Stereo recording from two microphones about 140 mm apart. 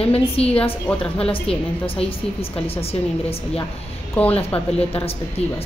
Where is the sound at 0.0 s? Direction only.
45° left (ahead or behind).